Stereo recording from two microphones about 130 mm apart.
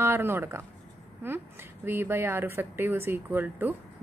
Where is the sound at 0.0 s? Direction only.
15° right (ahead or behind).